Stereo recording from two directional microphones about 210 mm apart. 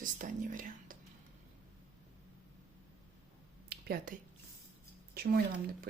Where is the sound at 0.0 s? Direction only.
40° right (ahead or behind).